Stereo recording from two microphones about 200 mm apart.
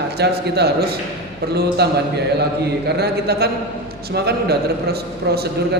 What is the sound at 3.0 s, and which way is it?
A man's voice, 55° right (ahead or behind).